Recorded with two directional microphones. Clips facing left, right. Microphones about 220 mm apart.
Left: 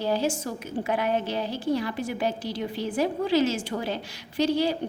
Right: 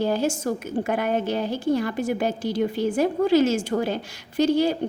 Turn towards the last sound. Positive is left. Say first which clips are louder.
# right 4 dB
turn(degrees=-50)  # may be behind; listen again after turning